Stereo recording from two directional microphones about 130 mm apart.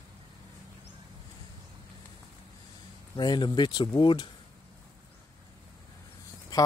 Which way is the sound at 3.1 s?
35° left (ahead or behind).